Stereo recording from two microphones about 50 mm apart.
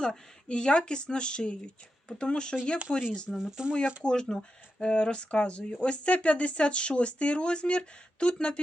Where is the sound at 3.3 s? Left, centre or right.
Centre.